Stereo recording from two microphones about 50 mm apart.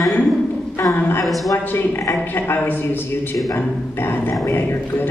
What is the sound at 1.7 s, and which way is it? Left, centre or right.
A man's voice, left.